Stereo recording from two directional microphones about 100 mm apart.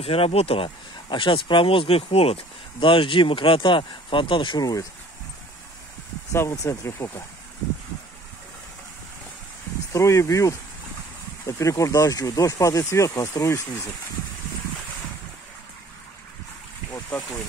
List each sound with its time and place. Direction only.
0.0 s speech: 75° left (ahead or behind); by 4.8 s 40° left (ahead or behind)
6.3 s speech: 30° left (ahead or behind)
9.9 s speech: 30° left (ahead or behind)